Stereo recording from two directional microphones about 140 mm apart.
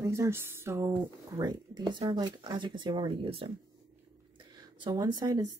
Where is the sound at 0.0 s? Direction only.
20° right (ahead or behind).